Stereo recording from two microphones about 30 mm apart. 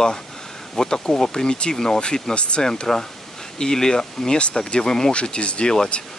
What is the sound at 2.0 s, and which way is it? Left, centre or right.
Speech, left.